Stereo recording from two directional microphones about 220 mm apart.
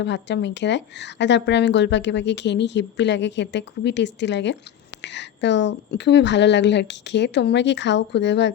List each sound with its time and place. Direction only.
0.0 s speech: 55° left (ahead or behind)